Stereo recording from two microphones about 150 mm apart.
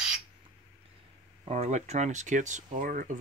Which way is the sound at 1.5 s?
45° right (ahead or behind).